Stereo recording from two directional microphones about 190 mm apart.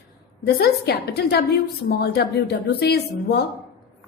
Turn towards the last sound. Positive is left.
turn(degrees=60)  # may be behind; listen again after turning